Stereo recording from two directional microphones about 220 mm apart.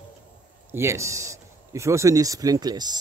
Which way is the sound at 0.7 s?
10° right (ahead or behind).